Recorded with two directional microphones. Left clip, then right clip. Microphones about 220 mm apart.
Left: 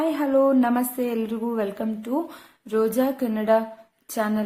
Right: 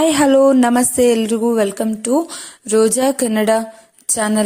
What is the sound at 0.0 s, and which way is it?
A woman's voice, 35° right (ahead or behind).